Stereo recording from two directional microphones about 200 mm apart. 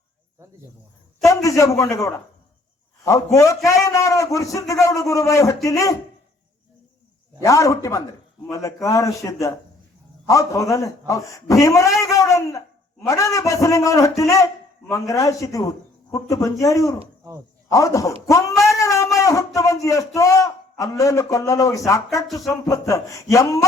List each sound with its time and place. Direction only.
1.2 s speech: 15° left (ahead or behind)
3.3 s speech: 15° left (ahead or behind)
7.4 s speech: 15° left (ahead or behind)
11.9 s a sound: 15° left (ahead or behind)
13.1 s speech: 15° left (ahead or behind)
18.8 s a sound: 15° left (ahead or behind)
21.0 s speech: 15° left (ahead or behind)